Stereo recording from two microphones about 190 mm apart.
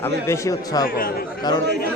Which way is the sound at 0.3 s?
20° left (ahead or behind).